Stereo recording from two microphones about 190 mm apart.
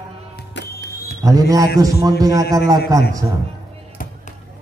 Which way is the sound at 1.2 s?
20° right (ahead or behind).